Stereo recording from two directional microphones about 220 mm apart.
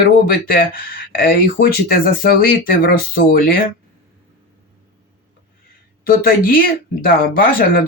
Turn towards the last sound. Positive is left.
turn(degrees=40)  # may be behind; listen again after turning